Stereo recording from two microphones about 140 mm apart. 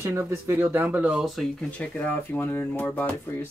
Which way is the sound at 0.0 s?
20° right (ahead or behind).